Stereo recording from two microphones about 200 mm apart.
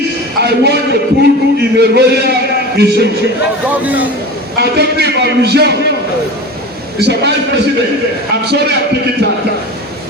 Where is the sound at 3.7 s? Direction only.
10° right (ahead or behind).